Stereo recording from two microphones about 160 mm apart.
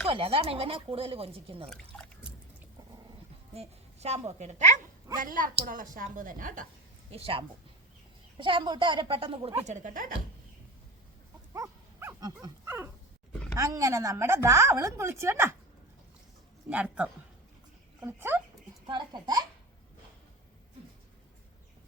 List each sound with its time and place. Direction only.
0.1 s speech: 35° right (ahead or behind)
1.7 s drip: 5° left (ahead or behind)
3.5 s a woman's voice: 40° right (ahead or behind); by 6.7 s 55° right (ahead or behind)
7.1 s speech: 35° right (ahead or behind)
9.6 s speech: 50° right (ahead or behind)
11.5 s livestock: 15° right (ahead or behind)
13.6 s a woman's voice: 20° right (ahead or behind)
16.6 s a woman's voice: 10° right (ahead or behind)
18.9 s a child's voice: 25° right (ahead or behind)